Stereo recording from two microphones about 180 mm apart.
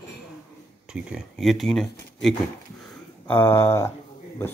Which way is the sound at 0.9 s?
Centre (ahead or behind).